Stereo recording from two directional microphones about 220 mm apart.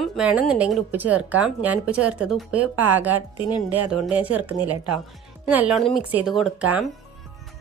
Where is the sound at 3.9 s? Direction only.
5° right (ahead or behind).